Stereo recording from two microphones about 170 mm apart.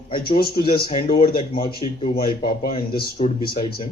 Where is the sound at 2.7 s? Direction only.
30° left (ahead or behind).